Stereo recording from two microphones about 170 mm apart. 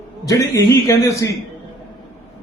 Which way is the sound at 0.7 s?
20° left (ahead or behind).